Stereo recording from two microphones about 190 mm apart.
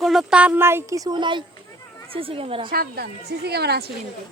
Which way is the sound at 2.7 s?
55° right (ahead or behind).